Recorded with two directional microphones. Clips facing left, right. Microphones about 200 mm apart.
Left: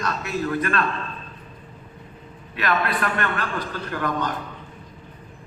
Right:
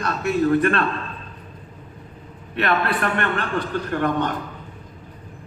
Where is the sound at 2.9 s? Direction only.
30° right (ahead or behind).